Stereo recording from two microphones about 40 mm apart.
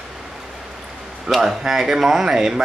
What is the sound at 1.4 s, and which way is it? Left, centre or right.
Speech, centre.